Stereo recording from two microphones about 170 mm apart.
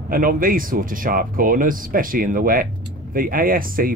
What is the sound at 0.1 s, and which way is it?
Speech, 55° right (ahead or behind).